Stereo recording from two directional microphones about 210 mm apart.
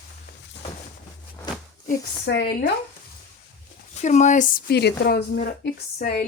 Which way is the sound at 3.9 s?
35° left (ahead or behind).